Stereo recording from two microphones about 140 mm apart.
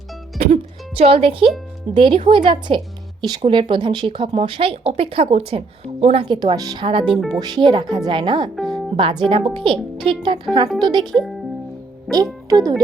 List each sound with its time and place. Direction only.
0.3 s music: 50° right (ahead or behind)
2.0 s a woman's voice: 35° right (ahead or behind); by 6.2 s 50° right (ahead or behind)
6.2 s a woman's voice: 35° right (ahead or behind)
8.5 s music: centre (ahead or behind)
9.0 s a woman's voice: 40° right (ahead or behind)
11.0 s speech: centre (ahead or behind)
12.1 s a child's voice: 25° right (ahead or behind)